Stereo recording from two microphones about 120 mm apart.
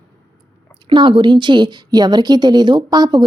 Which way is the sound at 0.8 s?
45° right (ahead or behind).